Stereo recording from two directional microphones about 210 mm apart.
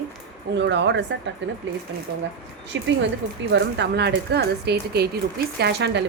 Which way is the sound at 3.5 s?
55° right (ahead or behind).